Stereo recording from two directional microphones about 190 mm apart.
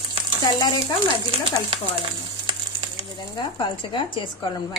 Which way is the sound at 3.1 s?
25° left (ahead or behind).